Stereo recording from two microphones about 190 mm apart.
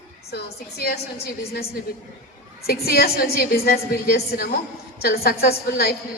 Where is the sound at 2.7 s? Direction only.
55° left (ahead or behind).